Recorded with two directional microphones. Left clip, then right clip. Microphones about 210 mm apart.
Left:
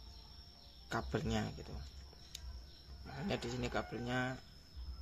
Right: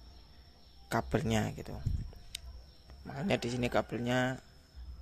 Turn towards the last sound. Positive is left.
turn(degrees=-30)  # may be behind; listen again after turning